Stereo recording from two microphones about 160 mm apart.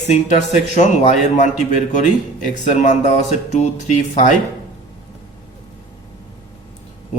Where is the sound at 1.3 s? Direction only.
50° left (ahead or behind).